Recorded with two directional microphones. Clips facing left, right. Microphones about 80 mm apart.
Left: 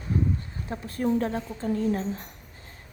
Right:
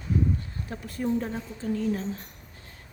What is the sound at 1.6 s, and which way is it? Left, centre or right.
Speech, left.